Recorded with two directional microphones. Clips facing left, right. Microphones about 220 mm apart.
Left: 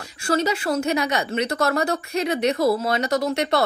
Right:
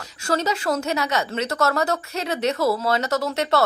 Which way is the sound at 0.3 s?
10° left (ahead or behind).